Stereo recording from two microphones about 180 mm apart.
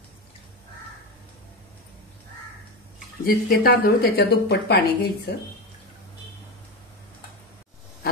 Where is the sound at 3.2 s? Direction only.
55° left (ahead or behind).